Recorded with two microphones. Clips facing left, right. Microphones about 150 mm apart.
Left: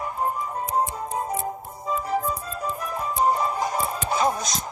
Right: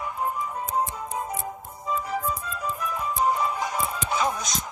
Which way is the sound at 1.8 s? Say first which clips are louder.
Left 2 dB; 40° left (ahead or behind).